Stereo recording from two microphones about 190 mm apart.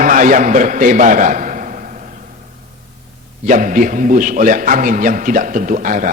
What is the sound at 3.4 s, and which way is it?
A man's voice, 45° right (ahead or behind).